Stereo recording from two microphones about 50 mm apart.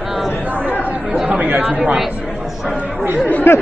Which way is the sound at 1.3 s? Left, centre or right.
Right.